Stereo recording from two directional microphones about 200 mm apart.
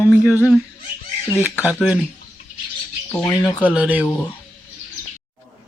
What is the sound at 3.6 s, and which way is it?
Speech, 5° right (ahead or behind).